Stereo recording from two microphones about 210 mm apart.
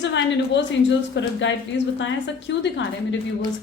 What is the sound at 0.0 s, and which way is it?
A woman's voice, 60° left (ahead or behind).